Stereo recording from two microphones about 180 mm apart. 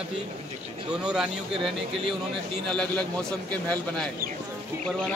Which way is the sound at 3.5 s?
10° left (ahead or behind).